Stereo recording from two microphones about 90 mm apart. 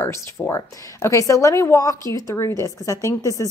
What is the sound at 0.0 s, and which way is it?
A woman's voice, 35° left (ahead or behind).